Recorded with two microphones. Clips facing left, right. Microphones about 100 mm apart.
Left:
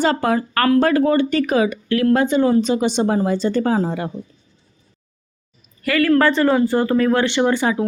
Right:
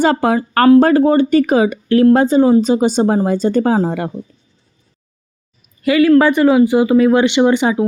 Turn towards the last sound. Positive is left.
turn(degrees=-20)  # may be behind; listen again after turning